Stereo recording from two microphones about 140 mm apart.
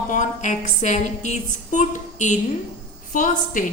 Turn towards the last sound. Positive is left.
turn(degrees=70)  # may be behind; listen again after turning